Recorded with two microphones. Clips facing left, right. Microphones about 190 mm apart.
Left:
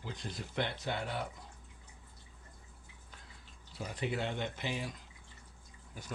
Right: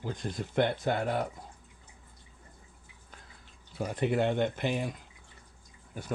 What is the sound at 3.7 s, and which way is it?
Speech, 55° right (ahead or behind).